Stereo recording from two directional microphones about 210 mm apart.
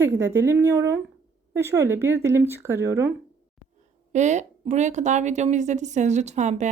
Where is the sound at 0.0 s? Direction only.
10° right (ahead or behind).